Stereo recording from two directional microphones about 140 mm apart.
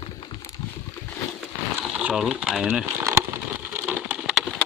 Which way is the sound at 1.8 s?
5° right (ahead or behind).